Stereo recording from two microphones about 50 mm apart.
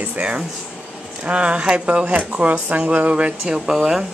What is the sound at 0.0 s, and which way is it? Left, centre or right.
Speech, right.